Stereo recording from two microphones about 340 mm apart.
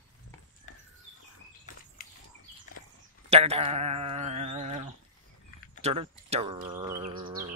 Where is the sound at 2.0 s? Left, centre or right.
Left.